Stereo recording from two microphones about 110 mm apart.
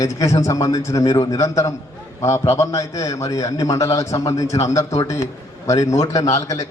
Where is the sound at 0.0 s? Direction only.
30° left (ahead or behind).